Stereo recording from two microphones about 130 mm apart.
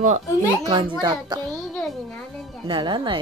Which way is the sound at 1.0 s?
35° right (ahead or behind).